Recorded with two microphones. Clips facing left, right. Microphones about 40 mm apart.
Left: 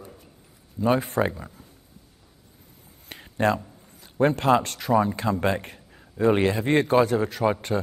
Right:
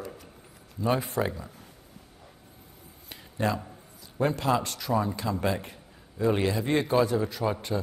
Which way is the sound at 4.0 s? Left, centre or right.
Left.